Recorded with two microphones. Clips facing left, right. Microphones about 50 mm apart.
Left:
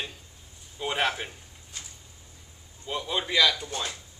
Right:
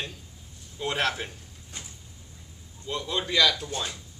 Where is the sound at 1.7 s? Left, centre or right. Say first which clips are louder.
Right 1 dB; right.